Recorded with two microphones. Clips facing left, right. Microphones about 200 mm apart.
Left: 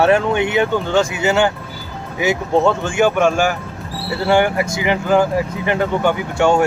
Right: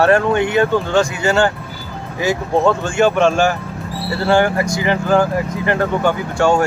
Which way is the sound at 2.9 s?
15° left (ahead or behind).